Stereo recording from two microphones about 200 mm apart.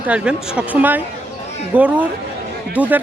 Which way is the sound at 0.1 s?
5° right (ahead or behind).